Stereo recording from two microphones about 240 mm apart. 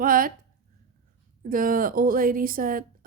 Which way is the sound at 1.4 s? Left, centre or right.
Right.